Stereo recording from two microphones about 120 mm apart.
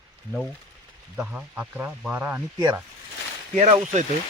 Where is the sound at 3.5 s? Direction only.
70° right (ahead or behind).